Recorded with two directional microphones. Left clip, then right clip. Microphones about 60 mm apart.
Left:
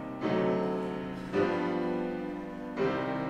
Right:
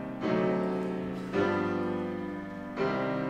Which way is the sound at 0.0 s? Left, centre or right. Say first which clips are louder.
Even; centre.